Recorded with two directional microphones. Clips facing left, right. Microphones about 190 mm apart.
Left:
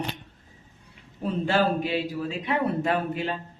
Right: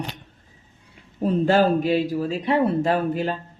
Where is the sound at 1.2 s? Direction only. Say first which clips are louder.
Right 6 dB; 40° right (ahead or behind).